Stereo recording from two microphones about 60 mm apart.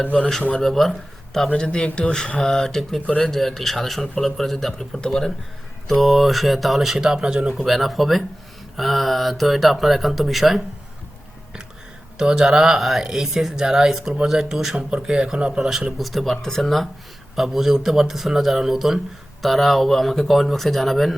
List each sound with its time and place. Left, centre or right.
0.0 s speech: centre
0.5 s speech: centre
1.5 s speech: centre
5.9 s speech: centre
12.1 s speech: centre
16.0 s speech: centre